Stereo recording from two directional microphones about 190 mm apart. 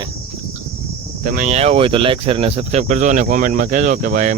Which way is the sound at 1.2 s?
40° right (ahead or behind).